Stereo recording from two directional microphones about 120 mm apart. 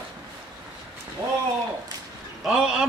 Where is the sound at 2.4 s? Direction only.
5° right (ahead or behind).